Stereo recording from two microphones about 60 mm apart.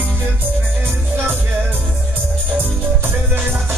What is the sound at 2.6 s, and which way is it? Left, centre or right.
Music, right.